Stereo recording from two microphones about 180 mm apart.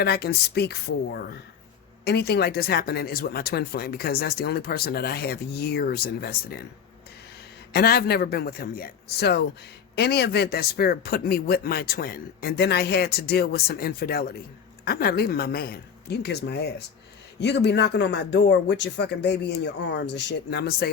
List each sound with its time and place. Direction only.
0.0 s speech: 65° left (ahead or behind)
7.7 s speech: 60° left (ahead or behind)